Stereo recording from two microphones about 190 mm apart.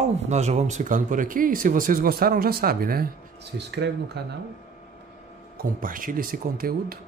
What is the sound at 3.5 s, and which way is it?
Speech, 65° right (ahead or behind).